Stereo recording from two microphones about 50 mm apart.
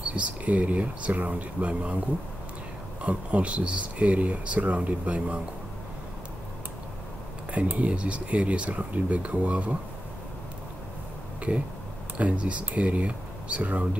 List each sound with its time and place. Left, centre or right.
0.1 s speech: right
3.0 s speech: right
7.5 s speech: right
12.2 s speech: right